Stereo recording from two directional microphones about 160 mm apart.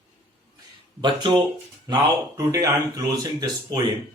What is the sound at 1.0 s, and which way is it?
Speech, 30° right (ahead or behind).